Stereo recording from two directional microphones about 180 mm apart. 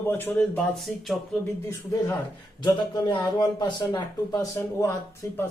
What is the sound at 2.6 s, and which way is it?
A man's voice, 25° left (ahead or behind).